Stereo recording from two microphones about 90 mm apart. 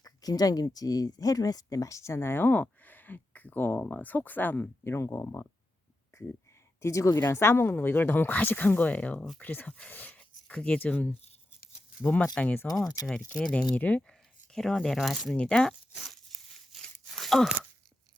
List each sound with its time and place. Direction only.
0.0 s speech: 45° left (ahead or behind)
6.1 s a sound: 35° left (ahead or behind)
6.8 s speech: 35° left (ahead or behind); by 14.0 s 15° left (ahead or behind)
14.1 s speech: 5° left (ahead or behind)
15.3 s speech: 10° left (ahead or behind)
15.9 s speech: 5° right (ahead or behind)
16.1 s tearing: 5° left (ahead or behind)